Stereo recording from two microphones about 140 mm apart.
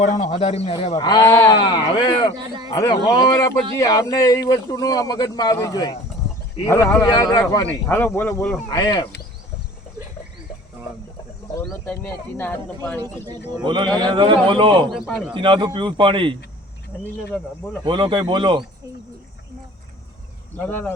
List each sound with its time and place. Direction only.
0.0 s speech: 50° left (ahead or behind)
0.9 s speech: 30° left (ahead or behind)
7.7 s speech: 15° left (ahead or behind)
8.7 s speech: 30° left (ahead or behind)
11.6 s speech: 10° left (ahead or behind)
13.6 s a man's voice: 35° right (ahead or behind)
14.8 s a man's voice: centre (ahead or behind)
15.3 s a man's voice: 35° right (ahead or behind)
17.8 s a man's voice: 35° right (ahead or behind)
20.6 s speech: 10° left (ahead or behind)